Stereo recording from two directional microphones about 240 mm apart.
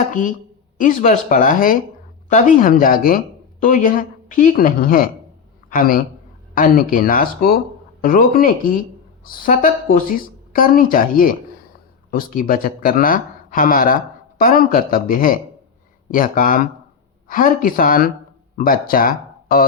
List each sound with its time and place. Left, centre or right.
0.1 s speech: left